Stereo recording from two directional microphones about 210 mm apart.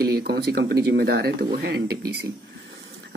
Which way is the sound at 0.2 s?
50° right (ahead or behind).